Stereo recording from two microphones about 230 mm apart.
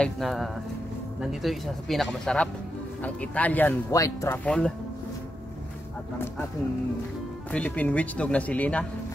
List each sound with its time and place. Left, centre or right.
0.0 s speech: centre
6.1 s speech: centre
7.5 s speech: centre